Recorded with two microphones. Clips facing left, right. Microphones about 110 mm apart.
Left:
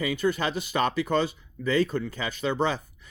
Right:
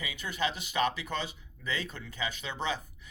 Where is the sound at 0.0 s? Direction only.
45° left (ahead or behind).